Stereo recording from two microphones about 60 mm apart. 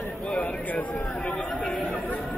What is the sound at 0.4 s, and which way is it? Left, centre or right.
Speech, left.